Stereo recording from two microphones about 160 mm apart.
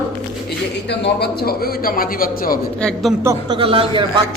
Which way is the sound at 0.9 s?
90° left.